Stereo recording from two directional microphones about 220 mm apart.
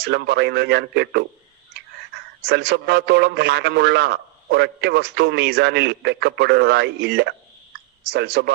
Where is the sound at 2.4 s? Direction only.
50° right (ahead or behind).